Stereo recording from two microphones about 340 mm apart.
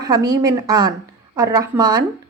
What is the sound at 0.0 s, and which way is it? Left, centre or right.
Speech, centre.